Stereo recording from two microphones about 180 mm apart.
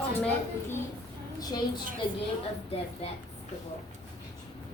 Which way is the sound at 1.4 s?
20° left (ahead or behind).